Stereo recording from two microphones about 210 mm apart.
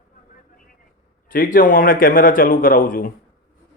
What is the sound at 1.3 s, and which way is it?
A man's voice, 40° left (ahead or behind).